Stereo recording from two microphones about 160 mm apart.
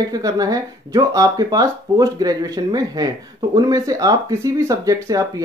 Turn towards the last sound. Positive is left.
turn(degrees=-20)  # may be behind; listen again after turning